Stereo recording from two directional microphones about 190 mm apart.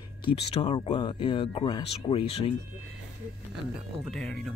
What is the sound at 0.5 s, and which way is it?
Speech, 30° left (ahead or behind).